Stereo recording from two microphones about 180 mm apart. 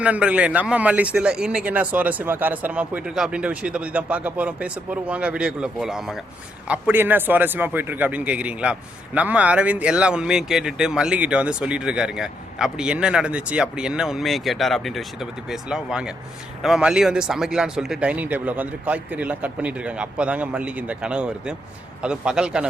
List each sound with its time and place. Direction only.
0.0 s a man's voice: 5° right (ahead or behind)